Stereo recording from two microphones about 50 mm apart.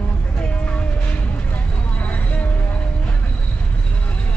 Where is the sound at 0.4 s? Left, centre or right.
Left.